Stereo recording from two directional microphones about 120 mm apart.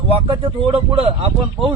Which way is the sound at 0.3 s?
50° right (ahead or behind).